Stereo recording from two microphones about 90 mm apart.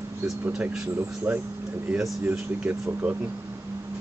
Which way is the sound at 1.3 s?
20° right (ahead or behind).